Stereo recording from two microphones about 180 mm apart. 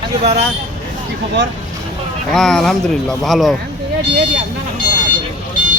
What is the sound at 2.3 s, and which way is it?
Speech, centre (ahead or behind).